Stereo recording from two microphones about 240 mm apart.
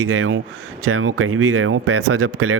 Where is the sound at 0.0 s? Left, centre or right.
Right.